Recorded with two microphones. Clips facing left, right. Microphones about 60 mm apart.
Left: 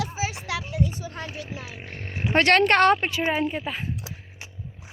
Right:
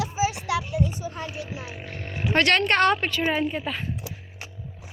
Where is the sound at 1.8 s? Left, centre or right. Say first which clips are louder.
Right 1 dB; left.